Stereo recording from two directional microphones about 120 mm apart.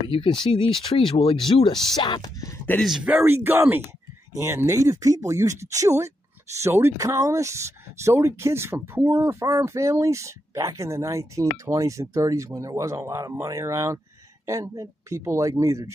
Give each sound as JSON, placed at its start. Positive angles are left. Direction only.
{"t": 0.1, "sound": "speech", "side_deg": 45}
{"t": 2.8, "sound": "speech", "side_deg": -5}